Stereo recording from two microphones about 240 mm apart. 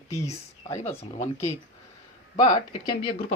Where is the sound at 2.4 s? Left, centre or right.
Centre.